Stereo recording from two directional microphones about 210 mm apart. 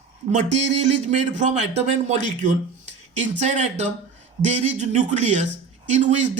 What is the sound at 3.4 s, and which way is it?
A man's voice, 30° right (ahead or behind).